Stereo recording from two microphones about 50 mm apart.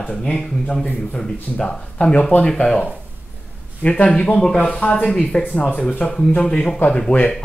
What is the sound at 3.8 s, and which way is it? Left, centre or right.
Speech, left.